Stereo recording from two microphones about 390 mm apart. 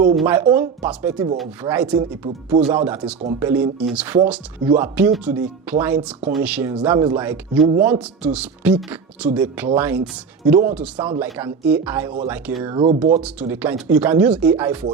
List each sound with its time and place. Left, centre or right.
0.2 s speech: centre
2.5 s speech: centre
2.8 s speech: centre